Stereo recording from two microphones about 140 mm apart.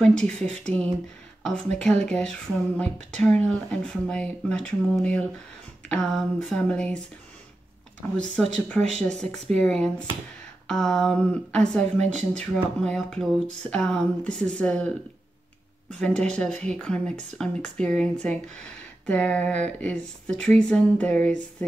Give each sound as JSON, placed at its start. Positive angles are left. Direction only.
{"t": 0.0, "sound": "speech", "side_deg": 5}
{"t": 8.2, "sound": "speech", "side_deg": 5}
{"t": 12.0, "sound": "speech", "side_deg": -55}
{"t": 12.4, "sound": "speech", "side_deg": 5}
{"t": 16.0, "sound": "speech", "side_deg": 5}